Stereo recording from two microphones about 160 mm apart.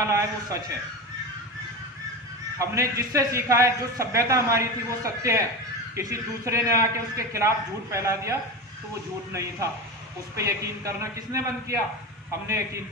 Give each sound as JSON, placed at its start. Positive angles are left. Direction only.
{"t": 0.0, "sound": "a man's voice", "side_deg": -20}
{"t": 2.6, "sound": "a man's voice", "side_deg": -20}
{"t": 10.3, "sound": "a man's voice", "side_deg": -20}